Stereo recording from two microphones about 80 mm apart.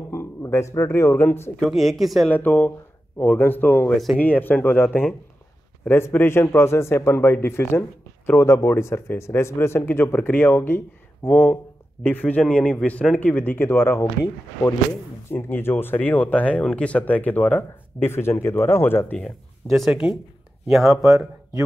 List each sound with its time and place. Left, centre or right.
0.1 s a man's voice: left
1.7 s speech: centre
2.2 s speech: left
3.9 s speech: centre
4.2 s a man's voice: left
13.4 s speech: left
15.3 s speech: left
19.1 s speech: centre
19.9 s speech: centre